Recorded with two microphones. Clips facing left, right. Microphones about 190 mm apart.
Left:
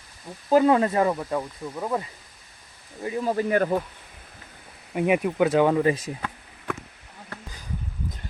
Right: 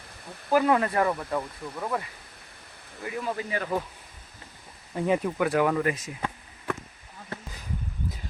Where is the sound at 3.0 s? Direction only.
30° left (ahead or behind).